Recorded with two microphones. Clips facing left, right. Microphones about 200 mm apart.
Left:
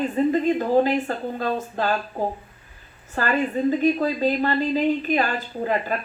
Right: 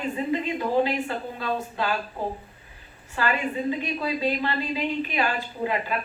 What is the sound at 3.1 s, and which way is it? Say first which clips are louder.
Speech: left 4 dB; 45° left (ahead or behind).